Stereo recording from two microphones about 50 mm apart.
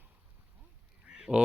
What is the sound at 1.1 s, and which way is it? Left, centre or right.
Duck, centre.